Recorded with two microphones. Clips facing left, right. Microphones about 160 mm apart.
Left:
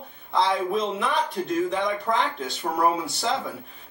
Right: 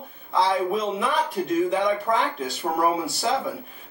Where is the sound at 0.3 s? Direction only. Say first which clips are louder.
Right 1 dB; 5° right (ahead or behind).